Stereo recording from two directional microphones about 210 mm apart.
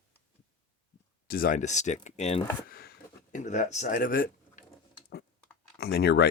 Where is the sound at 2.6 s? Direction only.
45° left (ahead or behind).